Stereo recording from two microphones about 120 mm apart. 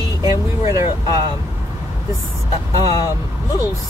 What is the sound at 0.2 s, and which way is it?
Vehicle, 30° right (ahead or behind).